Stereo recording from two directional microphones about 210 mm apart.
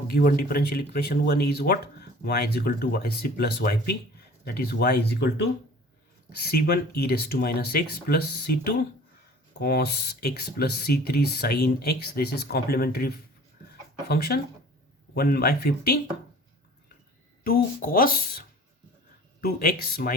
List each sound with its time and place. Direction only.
0.1 s speech: 45° left (ahead or behind)
17.4 s speech: 45° left (ahead or behind)